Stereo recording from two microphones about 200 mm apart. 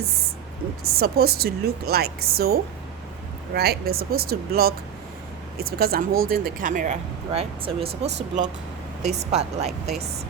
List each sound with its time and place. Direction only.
0.9 s a woman's voice: 50° right (ahead or behind)
5.7 s speech: 50° right (ahead or behind); by 9.9 s 35° right (ahead or behind)